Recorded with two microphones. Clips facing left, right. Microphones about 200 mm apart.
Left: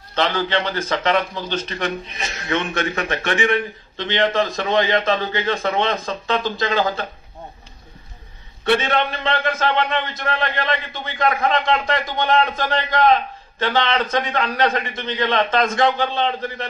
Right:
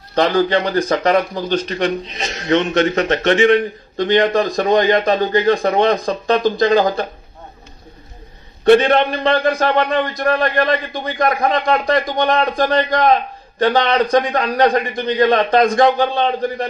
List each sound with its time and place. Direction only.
0.1 s a man's voice: 45° right (ahead or behind)
8.6 s a man's voice: 45° right (ahead or behind)